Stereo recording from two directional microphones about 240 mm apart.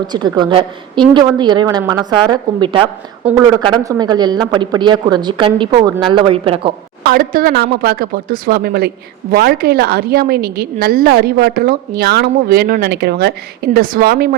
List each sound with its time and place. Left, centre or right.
0.1 s a woman's voice: centre
7.0 s a woman's voice: right